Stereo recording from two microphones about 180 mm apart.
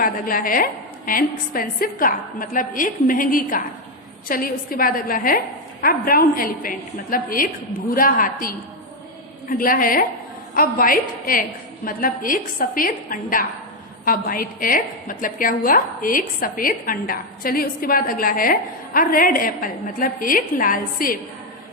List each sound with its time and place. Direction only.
0.0 s a woman's voice: 50° left (ahead or behind)